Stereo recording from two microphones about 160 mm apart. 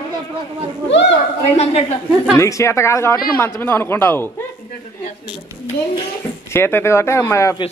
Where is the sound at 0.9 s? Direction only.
90° left.